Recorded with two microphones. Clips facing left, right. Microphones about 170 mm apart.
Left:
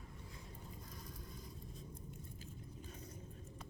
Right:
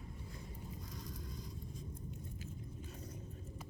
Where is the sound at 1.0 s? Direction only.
75° right (ahead or behind).